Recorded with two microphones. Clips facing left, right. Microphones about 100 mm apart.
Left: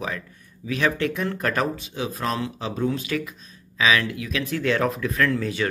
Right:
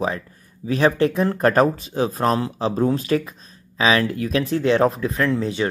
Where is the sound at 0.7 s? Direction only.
35° right (ahead or behind).